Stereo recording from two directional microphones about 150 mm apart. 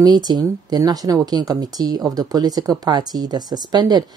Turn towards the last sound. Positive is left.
turn(degrees=-30)  # may be behind; listen again after turning